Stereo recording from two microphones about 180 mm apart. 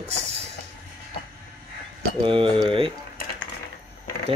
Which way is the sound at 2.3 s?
30° right (ahead or behind).